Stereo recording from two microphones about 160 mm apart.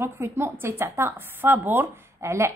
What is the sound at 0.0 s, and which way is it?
A woman's voice, 15° right (ahead or behind).